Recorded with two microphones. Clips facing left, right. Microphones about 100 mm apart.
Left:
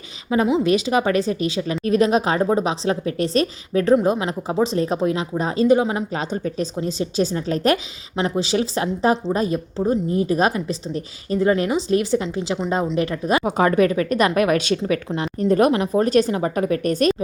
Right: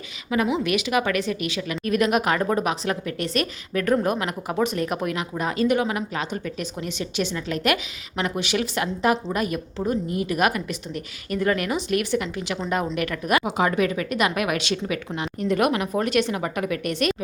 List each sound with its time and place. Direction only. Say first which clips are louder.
0.3 s a woman's voice: left 5 dB; 30° left (ahead or behind)
13.6 s a woman's voice: left 5 dB; 40° left (ahead or behind)